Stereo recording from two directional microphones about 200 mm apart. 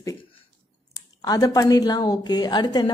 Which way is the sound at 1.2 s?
20° left (ahead or behind).